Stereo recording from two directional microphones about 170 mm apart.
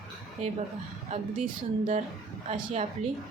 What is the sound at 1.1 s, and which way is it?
Speech, 45° right (ahead or behind).